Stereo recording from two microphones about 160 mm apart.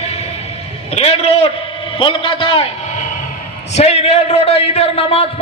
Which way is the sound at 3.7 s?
40° left (ahead or behind).